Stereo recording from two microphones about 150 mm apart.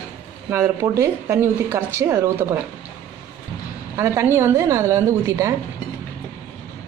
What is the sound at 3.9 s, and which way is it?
A woman's voice, 15° right (ahead or behind).